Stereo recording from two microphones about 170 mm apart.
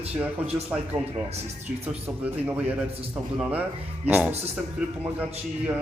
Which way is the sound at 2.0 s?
10° right (ahead or behind).